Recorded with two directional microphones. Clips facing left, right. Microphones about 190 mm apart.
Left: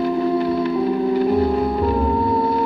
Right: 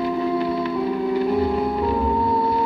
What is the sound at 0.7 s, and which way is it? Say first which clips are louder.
Music: left 2 dB; 10° left (ahead or behind).